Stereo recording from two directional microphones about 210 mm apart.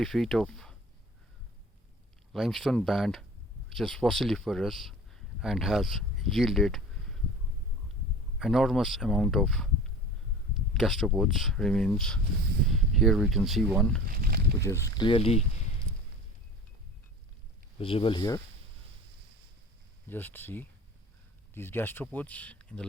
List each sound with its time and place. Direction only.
0.0 s speech: centre (ahead or behind)
2.3 s speech: centre (ahead or behind)
8.4 s speech: centre (ahead or behind)
14.1 s speech: 45° right (ahead or behind)
14.6 s speech: 15° left (ahead or behind)
17.7 s speech: 25° left (ahead or behind)
20.1 s speech: 10° left (ahead or behind)